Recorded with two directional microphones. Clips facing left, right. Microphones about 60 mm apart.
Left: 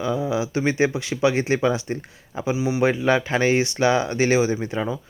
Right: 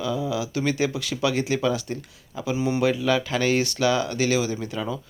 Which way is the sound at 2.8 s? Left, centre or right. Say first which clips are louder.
Left 4 dB; left.